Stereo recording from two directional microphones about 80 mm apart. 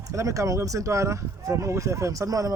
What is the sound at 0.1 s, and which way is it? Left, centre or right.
Speech, right.